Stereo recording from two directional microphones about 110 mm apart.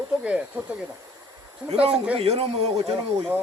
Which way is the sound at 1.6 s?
60° right (ahead or behind).